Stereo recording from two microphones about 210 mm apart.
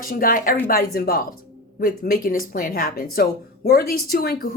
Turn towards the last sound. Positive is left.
turn(degrees=45)  # may be behind; listen again after turning